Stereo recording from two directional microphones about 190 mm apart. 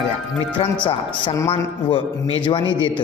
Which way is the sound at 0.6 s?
30° left (ahead or behind).